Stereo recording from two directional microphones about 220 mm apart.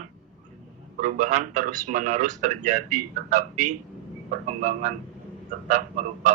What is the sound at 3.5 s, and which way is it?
Speech, 90° right.